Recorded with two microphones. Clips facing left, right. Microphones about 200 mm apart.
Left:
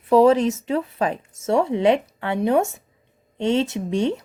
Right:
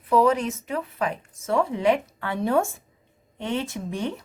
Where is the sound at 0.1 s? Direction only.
25° left (ahead or behind).